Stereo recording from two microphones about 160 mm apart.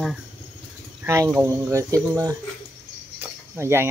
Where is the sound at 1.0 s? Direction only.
15° right (ahead or behind).